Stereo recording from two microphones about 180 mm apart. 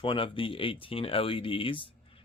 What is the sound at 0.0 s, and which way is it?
Speech, 30° left (ahead or behind).